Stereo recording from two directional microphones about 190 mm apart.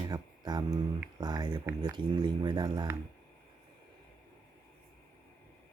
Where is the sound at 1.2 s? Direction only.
20° right (ahead or behind).